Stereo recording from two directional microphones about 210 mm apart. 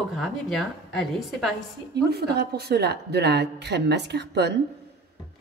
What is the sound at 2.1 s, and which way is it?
Speech, 50° right (ahead or behind).